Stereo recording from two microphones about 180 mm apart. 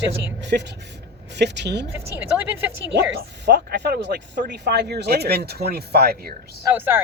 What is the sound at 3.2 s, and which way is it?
Speech, 65° right (ahead or behind).